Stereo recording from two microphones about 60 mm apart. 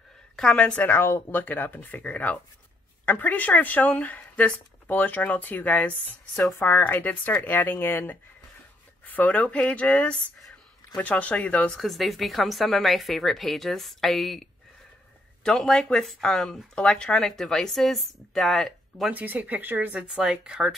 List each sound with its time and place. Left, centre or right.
0.6 s speech: left
0.8 s speech: left
1.4 s speech: left
6.3 s a woman's voice: centre
6.8 s speech: left
11.8 s a woman's voice: centre
19.0 s speech: right
20.1 s speech: centre